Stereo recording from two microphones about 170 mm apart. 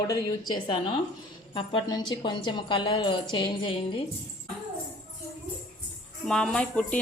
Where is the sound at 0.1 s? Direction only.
20° left (ahead or behind).